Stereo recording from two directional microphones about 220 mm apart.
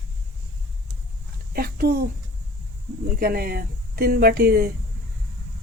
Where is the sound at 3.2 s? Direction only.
45° right (ahead or behind).